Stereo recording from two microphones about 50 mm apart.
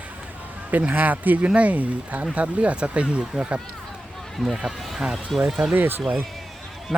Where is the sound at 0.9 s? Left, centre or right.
Right.